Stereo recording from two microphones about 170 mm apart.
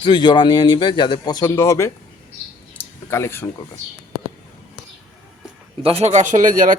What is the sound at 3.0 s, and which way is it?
Speech, 15° left (ahead or behind).